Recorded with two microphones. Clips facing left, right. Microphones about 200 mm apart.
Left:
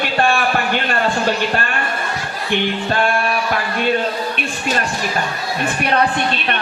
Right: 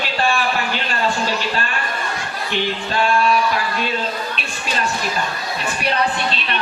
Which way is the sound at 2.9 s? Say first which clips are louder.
Right 2 dB; 55° left (ahead or behind).